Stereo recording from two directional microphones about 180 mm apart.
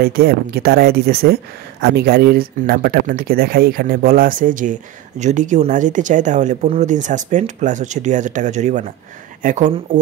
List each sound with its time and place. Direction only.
0.0 s speech: 60° right (ahead or behind)